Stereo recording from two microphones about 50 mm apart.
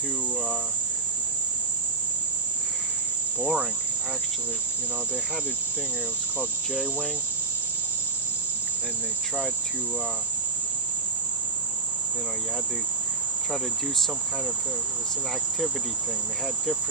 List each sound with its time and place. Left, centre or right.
3.3 s cricket: right
6.7 s cricket: centre
13.5 s cricket: centre